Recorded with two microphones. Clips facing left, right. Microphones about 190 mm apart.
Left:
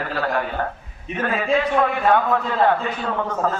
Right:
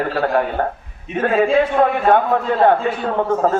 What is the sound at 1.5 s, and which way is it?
Speech, 35° right (ahead or behind).